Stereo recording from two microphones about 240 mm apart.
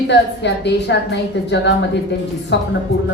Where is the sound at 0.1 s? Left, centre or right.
Left.